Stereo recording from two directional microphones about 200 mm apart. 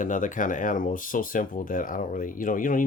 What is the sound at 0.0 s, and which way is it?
Speech, 40° left (ahead or behind).